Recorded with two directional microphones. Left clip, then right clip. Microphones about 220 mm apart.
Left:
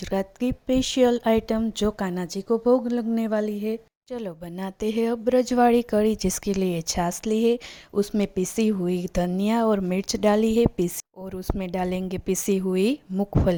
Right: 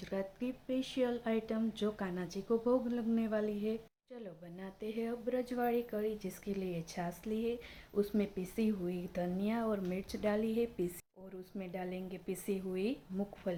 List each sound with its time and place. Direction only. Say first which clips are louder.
0.0 s speech: left 13 dB; 40° left (ahead or behind)